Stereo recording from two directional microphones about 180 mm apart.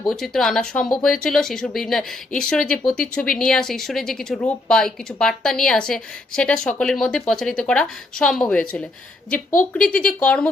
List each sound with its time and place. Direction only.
0.1 s speech: centre (ahead or behind)
9.5 s speech: 45° left (ahead or behind)
9.8 s speech: 5° left (ahead or behind)